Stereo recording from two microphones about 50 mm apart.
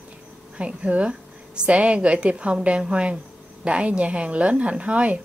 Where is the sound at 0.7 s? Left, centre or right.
Right.